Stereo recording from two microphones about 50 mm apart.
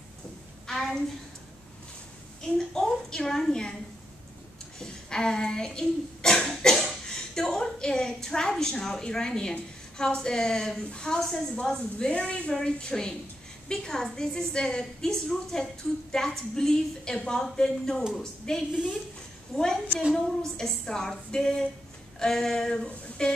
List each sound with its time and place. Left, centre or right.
0.7 s a woman's voice: centre
2.7 s a woman's voice: centre
4.7 s a woman's voice: centre
11.1 s a woman's voice: centre
11.6 s a woman's voice: centre
18.7 s a woman's voice: centre
19.5 s a woman's voice: centre